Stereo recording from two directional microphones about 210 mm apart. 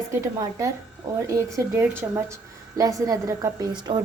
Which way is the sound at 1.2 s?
15° right (ahead or behind).